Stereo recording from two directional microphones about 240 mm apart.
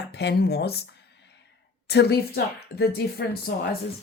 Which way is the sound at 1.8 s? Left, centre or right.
Left.